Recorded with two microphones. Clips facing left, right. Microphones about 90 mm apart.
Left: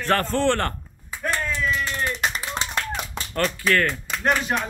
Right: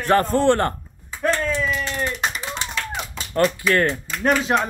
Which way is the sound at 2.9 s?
15° right (ahead or behind).